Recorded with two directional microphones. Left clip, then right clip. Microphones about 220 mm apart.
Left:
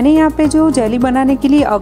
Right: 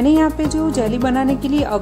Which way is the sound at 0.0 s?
30° left (ahead or behind).